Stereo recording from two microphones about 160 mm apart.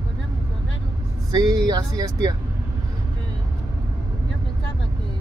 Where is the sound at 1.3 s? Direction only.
25° right (ahead or behind).